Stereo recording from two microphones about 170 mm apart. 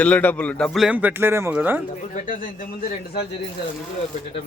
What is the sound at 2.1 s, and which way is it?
Speech, 55° left (ahead or behind).